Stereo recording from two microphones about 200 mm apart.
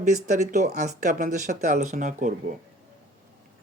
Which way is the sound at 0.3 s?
35° right (ahead or behind).